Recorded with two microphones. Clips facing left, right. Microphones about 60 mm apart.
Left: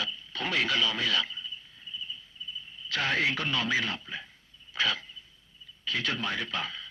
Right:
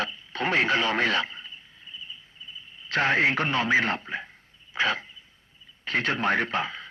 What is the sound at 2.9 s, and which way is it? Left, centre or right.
A man's voice, right.